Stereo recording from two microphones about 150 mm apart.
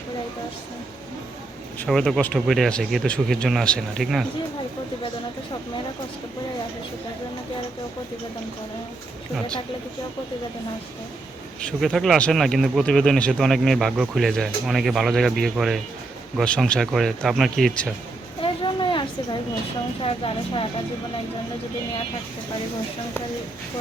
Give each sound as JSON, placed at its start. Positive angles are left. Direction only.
{"t": 1.9, "sound": "speech", "side_deg": 0}
{"t": 11.8, "sound": "speech", "side_deg": 0}
{"t": 18.4, "sound": "a sound", "side_deg": 35}
{"t": 20.0, "sound": "speech", "side_deg": 35}